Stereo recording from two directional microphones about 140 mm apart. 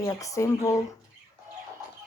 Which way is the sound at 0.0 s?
25° left (ahead or behind).